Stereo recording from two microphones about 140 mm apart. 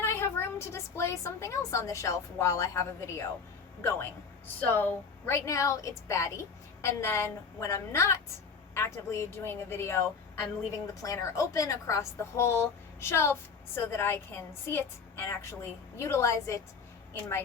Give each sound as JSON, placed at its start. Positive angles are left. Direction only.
{"t": 0.0, "sound": "a woman's voice", "side_deg": 20}
{"t": 11.0, "sound": "a woman's voice", "side_deg": 25}